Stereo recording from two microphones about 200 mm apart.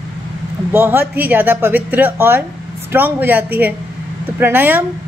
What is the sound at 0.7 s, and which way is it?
A woman's voice, 10° right (ahead or behind).